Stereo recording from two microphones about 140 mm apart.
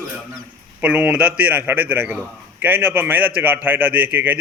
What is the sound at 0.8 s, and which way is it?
A man's voice, 10° right (ahead or behind).